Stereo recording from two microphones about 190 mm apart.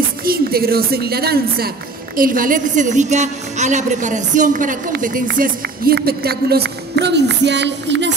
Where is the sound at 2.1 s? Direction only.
45° right (ahead or behind).